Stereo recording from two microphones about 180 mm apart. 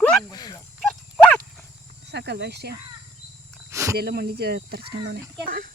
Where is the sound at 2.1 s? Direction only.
70° right (ahead or behind).